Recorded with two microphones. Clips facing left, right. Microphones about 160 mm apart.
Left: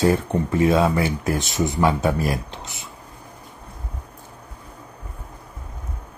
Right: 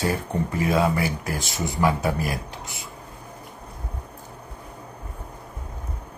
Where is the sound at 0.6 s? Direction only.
25° left (ahead or behind).